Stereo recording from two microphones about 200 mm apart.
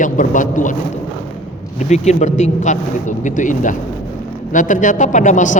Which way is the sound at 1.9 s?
35° left (ahead or behind).